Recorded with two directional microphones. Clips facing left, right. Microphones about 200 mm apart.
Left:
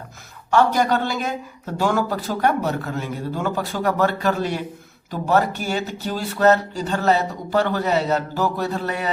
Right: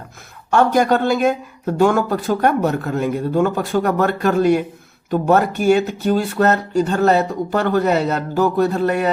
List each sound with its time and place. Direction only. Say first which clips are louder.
0.5 s speech: right 3 dB; 50° right (ahead or behind)